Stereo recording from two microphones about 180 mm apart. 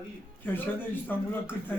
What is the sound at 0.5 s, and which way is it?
Speech, 10° left (ahead or behind).